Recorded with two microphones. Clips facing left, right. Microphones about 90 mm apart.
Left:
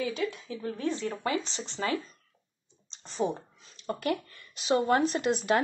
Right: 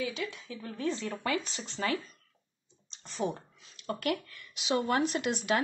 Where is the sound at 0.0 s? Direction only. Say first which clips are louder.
Left 4 dB; 40° left (ahead or behind).